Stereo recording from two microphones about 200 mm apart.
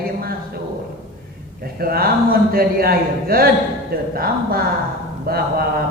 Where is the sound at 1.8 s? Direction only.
50° right (ahead or behind).